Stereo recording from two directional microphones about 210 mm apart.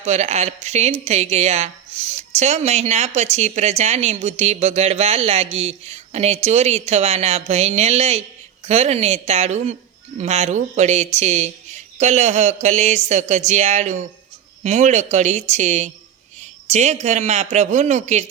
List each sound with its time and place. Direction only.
0.0 s a woman's voice: 30° right (ahead or behind)